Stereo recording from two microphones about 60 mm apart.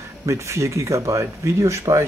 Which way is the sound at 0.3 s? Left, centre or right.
Right.